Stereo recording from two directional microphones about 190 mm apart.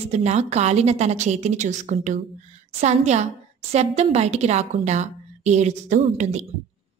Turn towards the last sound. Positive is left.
turn(degrees=-35)  # may be behind; listen again after turning